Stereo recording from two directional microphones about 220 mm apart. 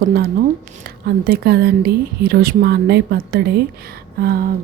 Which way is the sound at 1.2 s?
45° right (ahead or behind).